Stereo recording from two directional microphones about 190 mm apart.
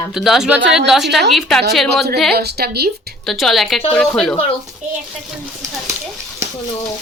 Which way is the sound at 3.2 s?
Centre (ahead or behind).